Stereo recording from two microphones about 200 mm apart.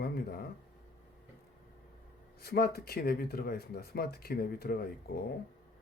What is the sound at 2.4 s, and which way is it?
Speech, 50° left (ahead or behind).